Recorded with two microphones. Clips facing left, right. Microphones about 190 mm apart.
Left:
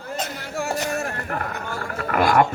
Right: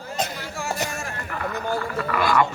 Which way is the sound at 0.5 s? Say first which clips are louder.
Left 7 dB; 60° left (ahead or behind).